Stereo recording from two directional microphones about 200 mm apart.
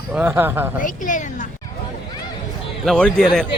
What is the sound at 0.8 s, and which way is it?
Speech, 40° left (ahead or behind).